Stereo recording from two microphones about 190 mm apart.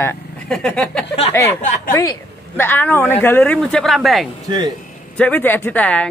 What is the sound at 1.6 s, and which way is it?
Speech, 40° left (ahead or behind).